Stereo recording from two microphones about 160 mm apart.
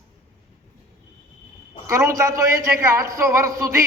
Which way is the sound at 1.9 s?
20° right (ahead or behind).